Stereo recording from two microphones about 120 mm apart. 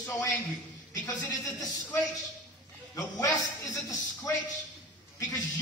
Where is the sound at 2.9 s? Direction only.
30° left (ahead or behind).